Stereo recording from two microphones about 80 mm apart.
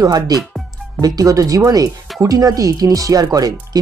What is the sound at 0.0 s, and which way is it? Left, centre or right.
Speech, right.